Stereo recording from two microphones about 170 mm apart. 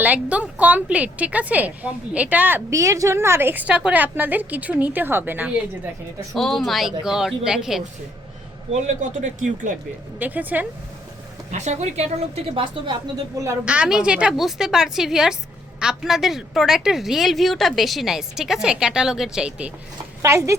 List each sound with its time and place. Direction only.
0.0 s a woman's voice: 10° right (ahead or behind)
6.3 s a woman's voice: centre (ahead or behind)
9.0 s speech: 45° right (ahead or behind)
10.2 s a woman's voice: 10° right (ahead or behind)
11.5 s a woman's voice: 45° right (ahead or behind)
13.4 s a woman's voice: 10° right (ahead or behind)
20.2 s a woman's voice: 15° right (ahead or behind)